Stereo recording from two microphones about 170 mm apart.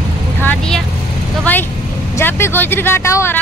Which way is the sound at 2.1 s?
15° left (ahead or behind).